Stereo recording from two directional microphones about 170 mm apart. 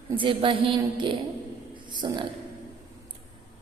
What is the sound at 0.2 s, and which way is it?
Music, 30° right (ahead or behind).